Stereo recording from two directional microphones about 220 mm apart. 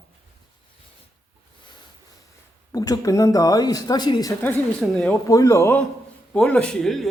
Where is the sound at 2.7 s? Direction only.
15° left (ahead or behind).